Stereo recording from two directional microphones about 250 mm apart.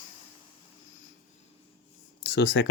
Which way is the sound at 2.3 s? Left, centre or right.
Left.